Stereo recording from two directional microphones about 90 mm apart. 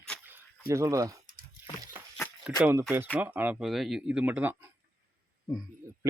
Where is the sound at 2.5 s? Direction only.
15° right (ahead or behind).